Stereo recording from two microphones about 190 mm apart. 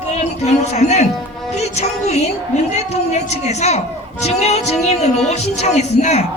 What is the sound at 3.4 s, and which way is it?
A woman's voice, 35° left (ahead or behind).